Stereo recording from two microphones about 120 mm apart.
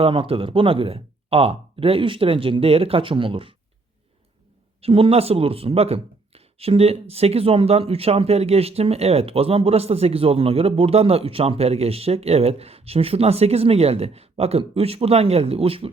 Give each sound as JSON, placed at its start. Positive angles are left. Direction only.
{"t": 0.0, "sound": "speech", "side_deg": -50}
{"t": 4.8, "sound": "speech", "side_deg": -50}